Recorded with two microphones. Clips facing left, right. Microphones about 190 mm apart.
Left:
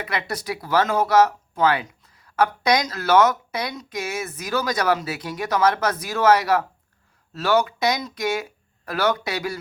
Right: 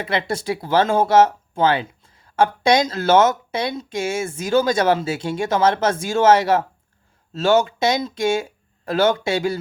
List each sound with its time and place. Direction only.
0.0 s speech: 25° right (ahead or behind)